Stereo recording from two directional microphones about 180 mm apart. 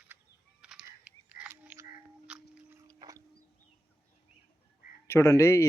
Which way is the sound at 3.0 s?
20° right (ahead or behind).